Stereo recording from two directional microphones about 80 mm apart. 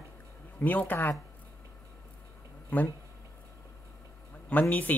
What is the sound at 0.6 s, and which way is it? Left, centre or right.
Speech, left.